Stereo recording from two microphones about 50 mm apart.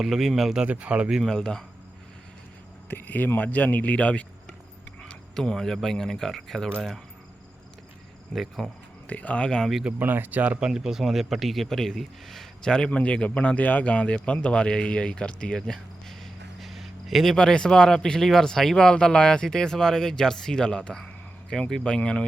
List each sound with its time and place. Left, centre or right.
0.0 s speech: centre
0.7 s speech: right
1.2 s speech: centre
2.9 s speech: left
5.0 s speech: centre
8.4 s speech: centre
9.0 s a man's voice: left
10.0 s speech: right
10.7 s speech: centre
12.7 s a man's voice: centre
14.4 s a sound: centre
17.3 s a man's voice: centre